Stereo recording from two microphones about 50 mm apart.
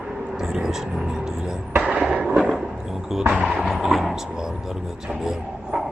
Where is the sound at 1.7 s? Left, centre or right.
Right.